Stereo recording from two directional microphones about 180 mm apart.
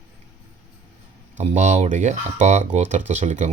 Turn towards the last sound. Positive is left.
turn(degrees=-40)  # may be behind; listen again after turning